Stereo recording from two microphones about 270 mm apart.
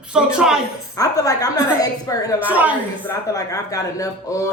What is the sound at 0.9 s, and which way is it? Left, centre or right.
Speech, centre.